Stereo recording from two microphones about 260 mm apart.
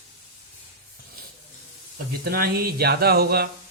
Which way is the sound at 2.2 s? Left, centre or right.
Right.